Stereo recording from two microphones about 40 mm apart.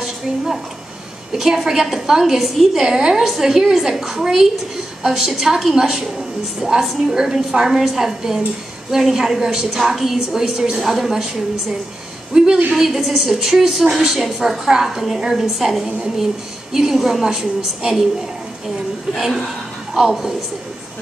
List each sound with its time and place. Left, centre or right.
1.4 s a woman's voice: centre
12.3 s a woman's voice: right
12.7 s a woman's voice: centre
19.1 s a woman's voice: centre